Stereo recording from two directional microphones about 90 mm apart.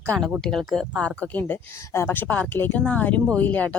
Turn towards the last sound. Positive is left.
turn(degrees=15)  # may be behind; listen again after turning